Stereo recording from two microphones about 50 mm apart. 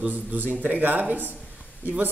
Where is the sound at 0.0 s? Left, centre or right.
Right.